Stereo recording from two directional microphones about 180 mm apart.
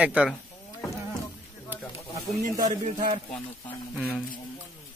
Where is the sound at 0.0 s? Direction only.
5° right (ahead or behind).